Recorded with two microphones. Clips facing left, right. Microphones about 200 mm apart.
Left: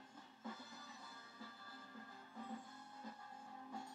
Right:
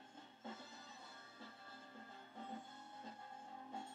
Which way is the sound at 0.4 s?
25° right (ahead or behind).